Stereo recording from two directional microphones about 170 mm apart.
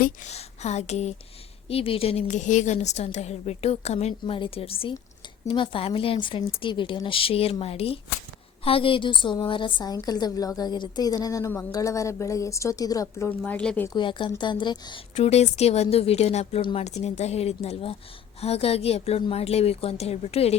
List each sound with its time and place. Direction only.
0.3 s a woman's voice: 40° left (ahead or behind); by 13.3 s 20° left (ahead or behind)
13.4 s speech: 5° left (ahead or behind)
13.8 s a woman's voice: 25° left (ahead or behind)
15.1 s a woman's voice: 40° left (ahead or behind)